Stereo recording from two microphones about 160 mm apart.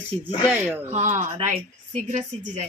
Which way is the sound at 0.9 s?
45° right (ahead or behind).